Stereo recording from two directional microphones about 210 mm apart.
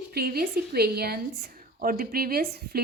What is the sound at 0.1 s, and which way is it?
Speech, 45° right (ahead or behind).